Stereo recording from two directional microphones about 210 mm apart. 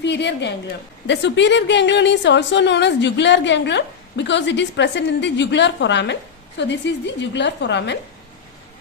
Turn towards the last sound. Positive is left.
turn(degrees=55)  # may be behind; listen again after turning